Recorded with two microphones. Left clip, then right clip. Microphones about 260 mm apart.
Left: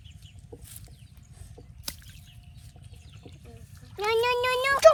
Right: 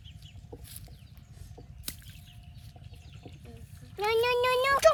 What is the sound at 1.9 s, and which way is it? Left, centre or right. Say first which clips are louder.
Bird flight: left 4 dB; centre.